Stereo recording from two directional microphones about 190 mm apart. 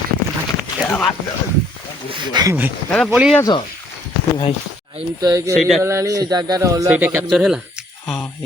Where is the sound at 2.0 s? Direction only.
25° right (ahead or behind).